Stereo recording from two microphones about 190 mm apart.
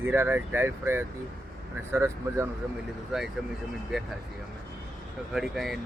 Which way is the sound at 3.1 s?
Centre (ahead or behind).